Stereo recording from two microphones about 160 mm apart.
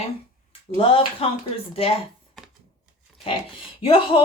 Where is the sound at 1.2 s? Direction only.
35° left (ahead or behind).